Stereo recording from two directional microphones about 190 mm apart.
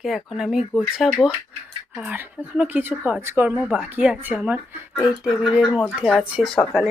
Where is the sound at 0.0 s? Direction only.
Centre (ahead or behind).